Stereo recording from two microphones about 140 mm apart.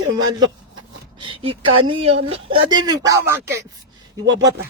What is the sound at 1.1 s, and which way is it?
Speech, 35° right (ahead or behind).